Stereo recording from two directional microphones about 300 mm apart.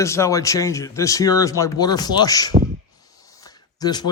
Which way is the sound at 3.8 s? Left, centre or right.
Centre.